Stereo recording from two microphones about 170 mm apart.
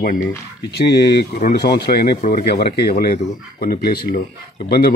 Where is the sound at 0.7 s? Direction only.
75° left (ahead or behind).